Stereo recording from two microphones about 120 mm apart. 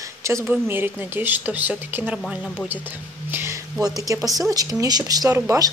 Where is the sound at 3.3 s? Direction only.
20° right (ahead or behind).